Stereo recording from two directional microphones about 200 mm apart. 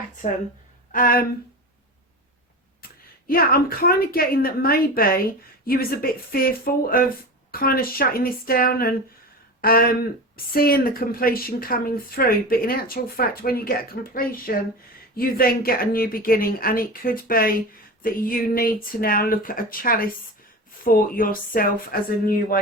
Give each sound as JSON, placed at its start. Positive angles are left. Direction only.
{"t": 0.9, "sound": "speech", "side_deg": 45}
{"t": 2.8, "sound": "speech", "side_deg": 45}